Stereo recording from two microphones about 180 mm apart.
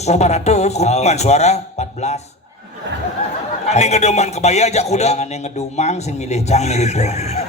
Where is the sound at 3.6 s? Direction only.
40° left (ahead or behind).